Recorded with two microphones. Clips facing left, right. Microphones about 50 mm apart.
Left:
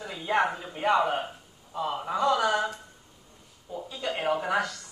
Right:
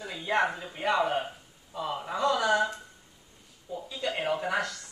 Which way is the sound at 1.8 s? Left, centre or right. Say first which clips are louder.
Left 2 dB; centre.